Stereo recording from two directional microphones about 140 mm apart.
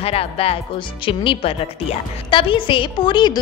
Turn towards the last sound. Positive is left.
turn(degrees=30)  # may be behind; listen again after turning